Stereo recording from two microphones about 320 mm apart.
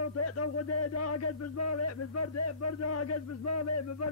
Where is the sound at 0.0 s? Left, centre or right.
Left.